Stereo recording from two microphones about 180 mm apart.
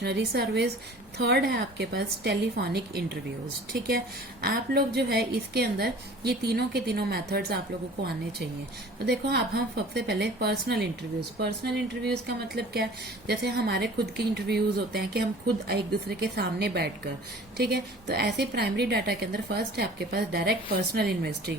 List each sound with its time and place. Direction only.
0.0 s a woman's voice: 65° right (ahead or behind)
9.0 s a woman's voice: 65° right (ahead or behind)